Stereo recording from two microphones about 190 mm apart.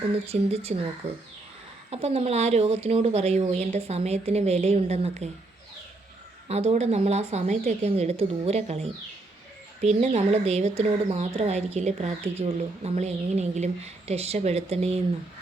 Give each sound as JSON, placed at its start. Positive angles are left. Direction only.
{"t": 0.3, "sound": "speech", "side_deg": -30}
{"t": 6.5, "sound": "speech", "side_deg": -35}